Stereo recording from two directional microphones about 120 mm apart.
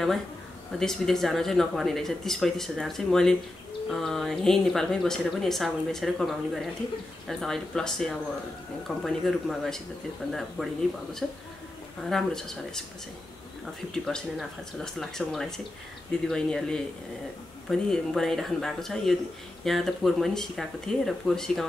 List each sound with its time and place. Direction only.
0.7 s a woman's voice: 5° left (ahead or behind)
11.2 s a woman's voice: centre (ahead or behind)
13.9 s a woman's voice: 5° left (ahead or behind)